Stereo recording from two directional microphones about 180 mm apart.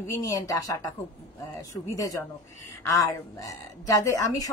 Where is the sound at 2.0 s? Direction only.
20° left (ahead or behind).